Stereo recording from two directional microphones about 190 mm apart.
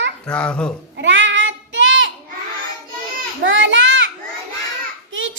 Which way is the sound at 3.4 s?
80° right.